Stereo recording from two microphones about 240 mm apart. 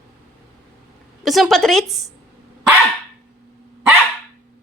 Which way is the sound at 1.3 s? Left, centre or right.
Centre.